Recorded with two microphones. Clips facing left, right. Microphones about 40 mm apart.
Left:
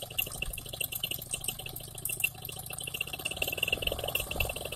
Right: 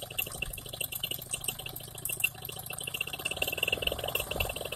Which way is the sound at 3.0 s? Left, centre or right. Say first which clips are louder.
Right 1 dB; centre.